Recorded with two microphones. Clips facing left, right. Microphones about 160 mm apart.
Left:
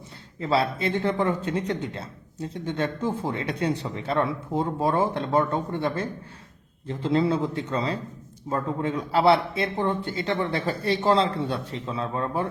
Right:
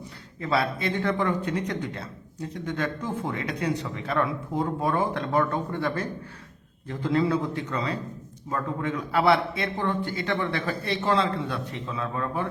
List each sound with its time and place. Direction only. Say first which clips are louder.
0.3 s speech: left 2 dB; 25° left (ahead or behind)